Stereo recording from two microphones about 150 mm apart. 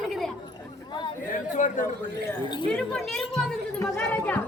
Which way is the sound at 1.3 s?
55° left (ahead or behind).